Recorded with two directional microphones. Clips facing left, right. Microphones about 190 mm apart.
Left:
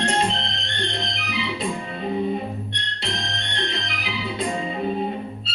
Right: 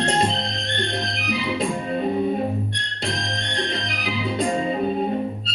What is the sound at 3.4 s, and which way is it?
Music, 45° right (ahead or behind).